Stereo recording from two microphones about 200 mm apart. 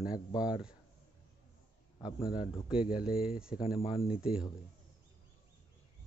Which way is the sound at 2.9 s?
5° right (ahead or behind).